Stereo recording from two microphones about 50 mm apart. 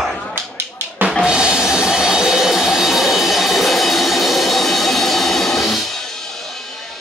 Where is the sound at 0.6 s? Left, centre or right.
Right.